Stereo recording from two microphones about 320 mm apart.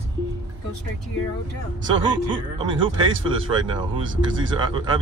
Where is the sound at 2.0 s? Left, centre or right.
Centre.